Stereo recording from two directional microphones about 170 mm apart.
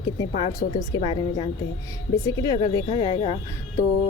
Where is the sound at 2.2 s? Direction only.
20° left (ahead or behind).